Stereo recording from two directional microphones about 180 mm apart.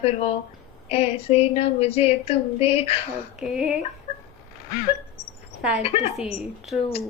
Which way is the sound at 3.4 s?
5° right (ahead or behind).